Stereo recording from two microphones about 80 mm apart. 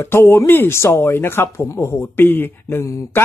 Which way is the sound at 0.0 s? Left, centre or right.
Left.